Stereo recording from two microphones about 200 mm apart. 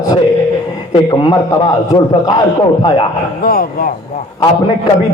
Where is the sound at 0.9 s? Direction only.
25° left (ahead or behind).